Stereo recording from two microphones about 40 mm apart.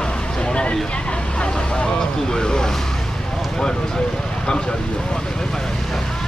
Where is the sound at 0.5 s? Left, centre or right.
Left.